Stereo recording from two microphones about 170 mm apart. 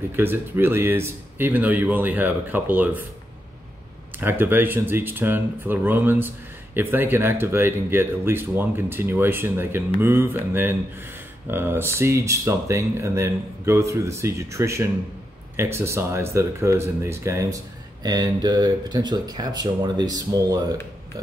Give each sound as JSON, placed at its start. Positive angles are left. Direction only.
{"t": 0.1, "sound": "speech", "side_deg": -15}
{"t": 4.2, "sound": "speech", "side_deg": -10}